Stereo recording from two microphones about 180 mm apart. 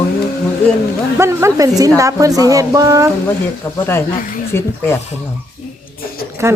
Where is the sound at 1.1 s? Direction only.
15° right (ahead or behind).